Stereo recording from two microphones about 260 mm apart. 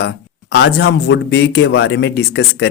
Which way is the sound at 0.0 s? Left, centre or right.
Left.